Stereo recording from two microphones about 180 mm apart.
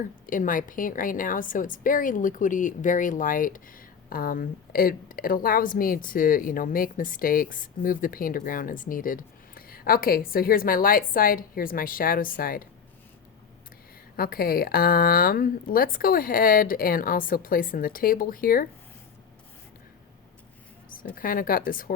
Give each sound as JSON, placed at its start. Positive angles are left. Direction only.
{"t": 0.3, "sound": "speech", "side_deg": 50}
{"t": 14.2, "sound": "speech", "side_deg": 55}
{"t": 21.2, "sound": "speech", "side_deg": 55}